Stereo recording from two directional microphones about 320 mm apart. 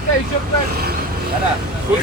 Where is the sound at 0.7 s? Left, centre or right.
Right.